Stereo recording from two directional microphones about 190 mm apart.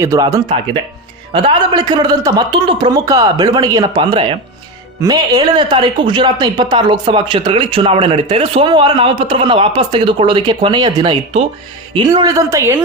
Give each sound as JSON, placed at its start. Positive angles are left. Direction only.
{"t": 0.0, "sound": "speech", "side_deg": -15}